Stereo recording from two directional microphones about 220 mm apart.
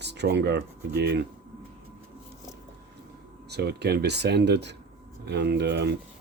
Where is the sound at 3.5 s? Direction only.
50° right (ahead or behind).